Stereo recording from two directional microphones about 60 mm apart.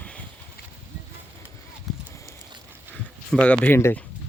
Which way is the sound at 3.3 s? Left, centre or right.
Centre.